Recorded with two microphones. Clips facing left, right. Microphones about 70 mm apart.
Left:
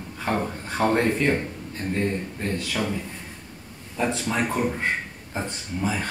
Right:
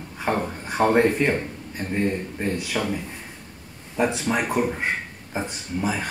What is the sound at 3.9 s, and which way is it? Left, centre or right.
Speech, centre.